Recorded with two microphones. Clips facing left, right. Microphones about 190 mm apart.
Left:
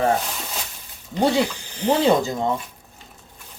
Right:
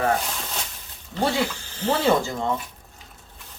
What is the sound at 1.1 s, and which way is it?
Speech, 20° left (ahead or behind).